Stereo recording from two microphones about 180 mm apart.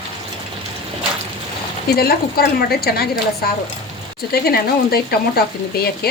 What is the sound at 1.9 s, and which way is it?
A woman's voice, 55° left (ahead or behind).